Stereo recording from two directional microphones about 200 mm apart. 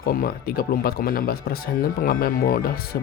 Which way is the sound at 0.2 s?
50° left (ahead or behind).